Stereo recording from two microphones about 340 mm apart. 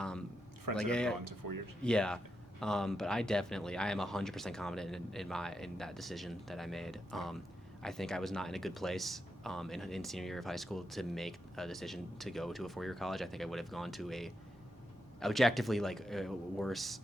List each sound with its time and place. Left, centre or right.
0.8 s speech: centre
1.2 s speech: right
1.8 s speech: centre